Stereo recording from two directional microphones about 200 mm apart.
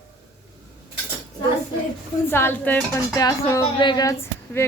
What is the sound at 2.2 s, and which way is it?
Speech, 10° left (ahead or behind).